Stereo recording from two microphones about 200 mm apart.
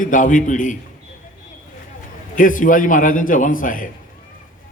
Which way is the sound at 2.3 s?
40° left (ahead or behind).